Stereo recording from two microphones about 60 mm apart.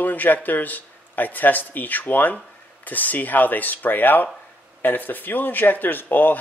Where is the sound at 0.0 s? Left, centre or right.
Left.